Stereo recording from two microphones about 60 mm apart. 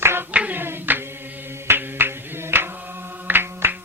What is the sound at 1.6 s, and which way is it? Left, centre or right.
Music, right.